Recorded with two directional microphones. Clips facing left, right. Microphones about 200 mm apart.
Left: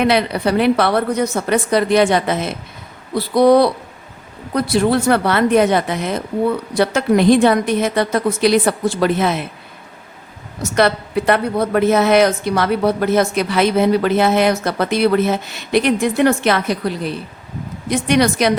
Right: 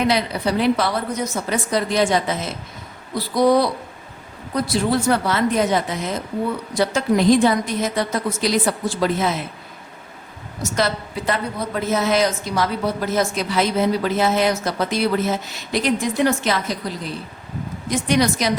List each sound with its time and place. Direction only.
0.0 s a woman's voice: 65° left (ahead or behind)
10.6 s a woman's voice: 60° left (ahead or behind)